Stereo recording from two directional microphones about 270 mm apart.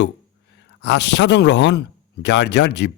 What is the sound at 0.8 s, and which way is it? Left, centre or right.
Speech, left.